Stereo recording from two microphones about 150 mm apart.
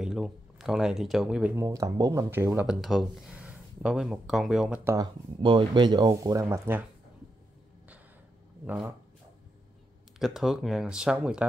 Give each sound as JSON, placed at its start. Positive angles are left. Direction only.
{"t": 0.0, "sound": "speech", "side_deg": -5}
{"t": 1.5, "sound": "speech", "side_deg": -20}
{"t": 2.6, "sound": "speech", "side_deg": 0}
{"t": 4.9, "sound": "speech", "side_deg": -35}
{"t": 8.6, "sound": "speech", "side_deg": -10}
{"t": 10.1, "sound": "speech", "side_deg": 0}